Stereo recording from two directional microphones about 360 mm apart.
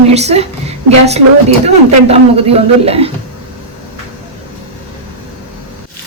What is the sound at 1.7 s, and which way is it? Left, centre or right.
Speech, centre.